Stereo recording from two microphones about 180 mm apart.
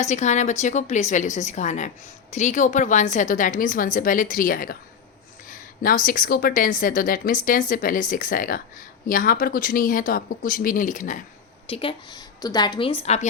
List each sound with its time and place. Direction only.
0.0 s a woman's voice: 40° left (ahead or behind)
11.7 s a woman's voice: 30° left (ahead or behind)